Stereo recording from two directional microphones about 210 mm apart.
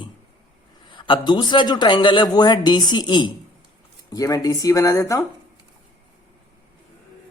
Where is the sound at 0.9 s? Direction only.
20° left (ahead or behind).